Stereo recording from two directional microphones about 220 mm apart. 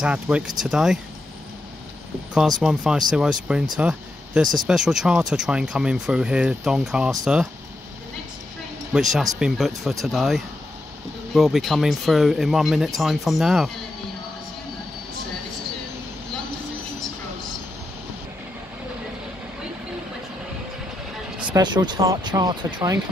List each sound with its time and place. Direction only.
0.0 s speech: 5° right (ahead or behind)
2.3 s speech: 5° right (ahead or behind)
9.1 s speech: centre (ahead or behind)
21.5 s speech: 20° right (ahead or behind)